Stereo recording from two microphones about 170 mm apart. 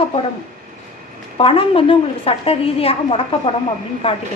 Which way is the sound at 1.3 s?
35° left (ahead or behind).